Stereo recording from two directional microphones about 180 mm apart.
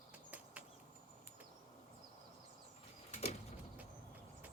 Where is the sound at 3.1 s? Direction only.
35° left (ahead or behind).